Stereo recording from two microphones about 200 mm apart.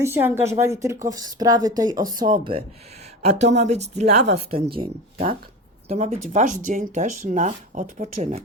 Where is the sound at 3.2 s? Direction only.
35° right (ahead or behind).